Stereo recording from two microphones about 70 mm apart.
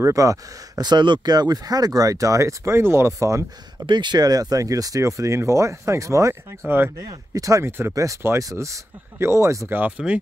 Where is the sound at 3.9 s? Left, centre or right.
Right.